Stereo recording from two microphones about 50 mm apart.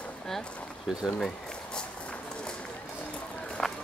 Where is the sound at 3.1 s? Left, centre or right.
Left.